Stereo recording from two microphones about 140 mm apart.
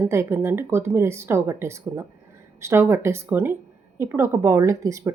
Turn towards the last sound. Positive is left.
turn(degrees=-20)  # may be behind; listen again after turning